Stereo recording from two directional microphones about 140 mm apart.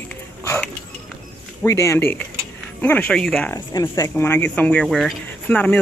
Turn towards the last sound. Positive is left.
turn(degrees=10)  # may be behind; listen again after turning